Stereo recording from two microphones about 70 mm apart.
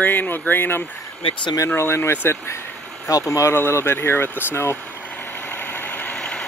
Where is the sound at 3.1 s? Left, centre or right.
Left.